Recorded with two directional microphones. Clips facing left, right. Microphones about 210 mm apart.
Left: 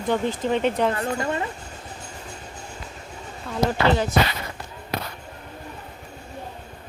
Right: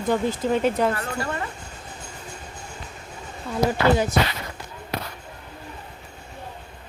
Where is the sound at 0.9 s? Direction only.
20° left (ahead or behind).